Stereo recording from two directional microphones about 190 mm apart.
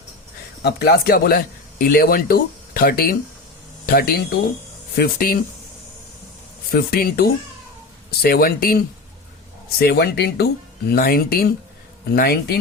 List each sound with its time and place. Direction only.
0.6 s speech: 55° left (ahead or behind)
6.7 s speech: 50° left (ahead or behind)